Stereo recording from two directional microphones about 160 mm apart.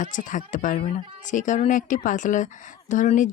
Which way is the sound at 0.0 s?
55° left (ahead or behind).